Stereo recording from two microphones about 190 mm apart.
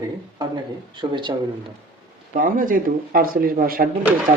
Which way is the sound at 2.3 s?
45° right (ahead or behind).